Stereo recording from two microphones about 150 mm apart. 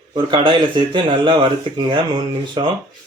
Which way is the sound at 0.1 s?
30° right (ahead or behind).